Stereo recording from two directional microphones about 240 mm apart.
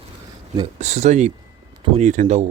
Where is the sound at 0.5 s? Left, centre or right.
Right.